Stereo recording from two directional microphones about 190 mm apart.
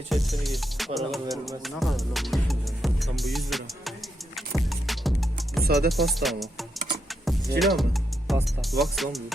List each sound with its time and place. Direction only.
0.1 s music: centre (ahead or behind)
5.6 s music: 55° right (ahead or behind)
5.9 s music: centre (ahead or behind)